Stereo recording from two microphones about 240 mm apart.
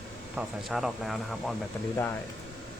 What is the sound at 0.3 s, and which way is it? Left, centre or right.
Speech, centre.